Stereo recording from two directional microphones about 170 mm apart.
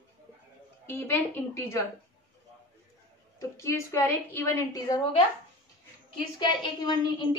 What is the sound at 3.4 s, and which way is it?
A woman's voice, 15° left (ahead or behind).